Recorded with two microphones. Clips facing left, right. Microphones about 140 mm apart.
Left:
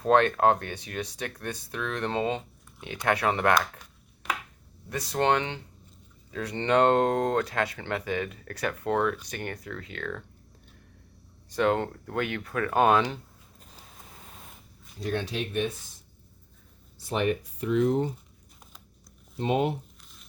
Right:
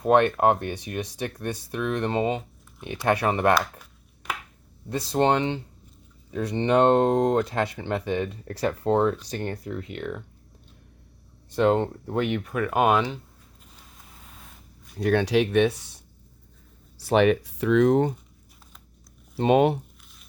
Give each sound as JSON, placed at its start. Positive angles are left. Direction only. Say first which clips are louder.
{"t": 0.0, "sound": "speech", "louder": "right 2 dB", "side_deg": -20}
{"t": 4.9, "sound": "speech", "louder": "right 3 dB", "side_deg": -25}
{"t": 11.5, "sound": "speech", "louder": "right 4 dB", "side_deg": -25}
{"t": 14.9, "sound": "speech", "louder": "right 9 dB", "side_deg": -65}
{"t": 17.0, "sound": "speech", "louder": "right 8 dB", "side_deg": -75}
{"t": 19.4, "sound": "speech", "louder": "right 7 dB", "side_deg": -75}